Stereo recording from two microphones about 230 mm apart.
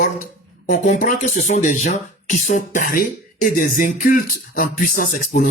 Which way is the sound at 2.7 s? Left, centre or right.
Left.